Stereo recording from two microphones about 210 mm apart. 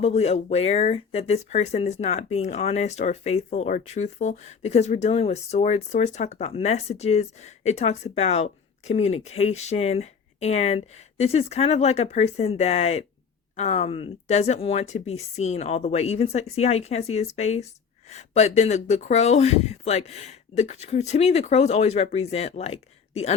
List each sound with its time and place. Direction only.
0.0 s speech: 30° left (ahead or behind)